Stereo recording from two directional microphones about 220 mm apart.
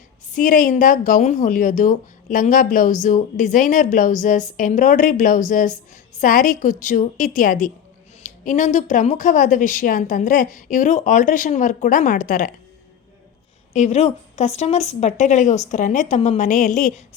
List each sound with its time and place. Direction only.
0.3 s a woman's voice: 40° left (ahead or behind)
13.7 s a woman's voice: 30° left (ahead or behind)